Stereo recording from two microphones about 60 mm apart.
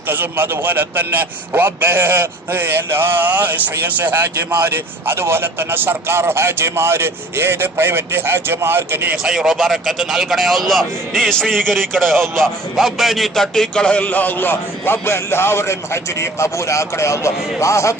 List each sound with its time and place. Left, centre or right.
0.1 s speech: right
9.1 s speech: centre
14.0 s a man's voice: left